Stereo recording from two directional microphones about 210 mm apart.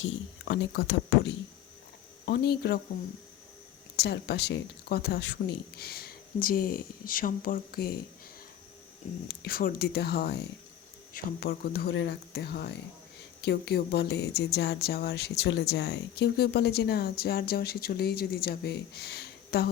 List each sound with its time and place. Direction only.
0.0 s speech: 60° left (ahead or behind)
3.9 s speech: 50° left (ahead or behind)
9.4 s speech: 45° left (ahead or behind)